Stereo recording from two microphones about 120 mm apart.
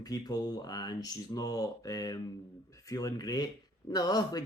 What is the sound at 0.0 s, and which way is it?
Speech, 35° left (ahead or behind).